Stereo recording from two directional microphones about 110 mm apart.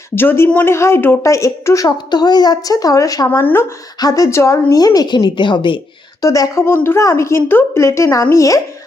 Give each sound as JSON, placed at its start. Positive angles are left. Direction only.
{"t": 0.2, "sound": "a woman's voice", "side_deg": 20}
{"t": 3.2, "sound": "a woman's voice", "side_deg": 20}
{"t": 4.0, "sound": "a woman's voice", "side_deg": 30}
{"t": 6.2, "sound": "a woman's voice", "side_deg": 30}